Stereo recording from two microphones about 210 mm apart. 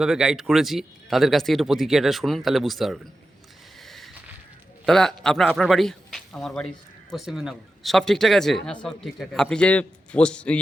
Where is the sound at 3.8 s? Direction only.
Centre (ahead or behind).